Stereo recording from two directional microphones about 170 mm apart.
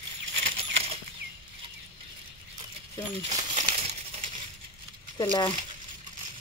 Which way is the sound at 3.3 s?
45° right (ahead or behind).